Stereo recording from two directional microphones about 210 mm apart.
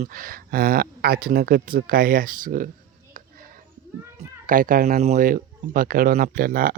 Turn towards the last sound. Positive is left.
turn(degrees=-40)  # may be behind; listen again after turning